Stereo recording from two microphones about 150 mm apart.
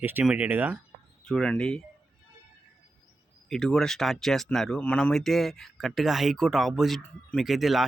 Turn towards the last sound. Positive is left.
turn(degrees=0)  # may be behind; listen again after turning